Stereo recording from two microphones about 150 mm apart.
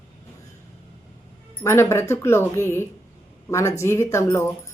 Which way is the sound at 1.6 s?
20° left (ahead or behind).